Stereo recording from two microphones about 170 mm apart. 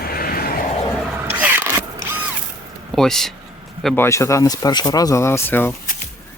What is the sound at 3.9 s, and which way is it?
Speech, 15° left (ahead or behind).